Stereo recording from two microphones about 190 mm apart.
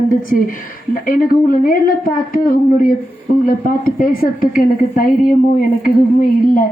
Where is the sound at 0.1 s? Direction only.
45° left (ahead or behind).